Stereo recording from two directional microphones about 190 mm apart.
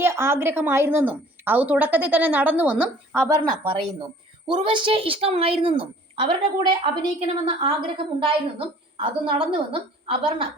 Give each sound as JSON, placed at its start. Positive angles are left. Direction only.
{"t": 0.0, "sound": "a woman's voice", "side_deg": -15}